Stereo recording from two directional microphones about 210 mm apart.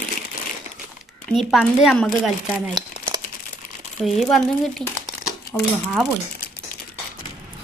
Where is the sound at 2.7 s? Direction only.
20° right (ahead or behind).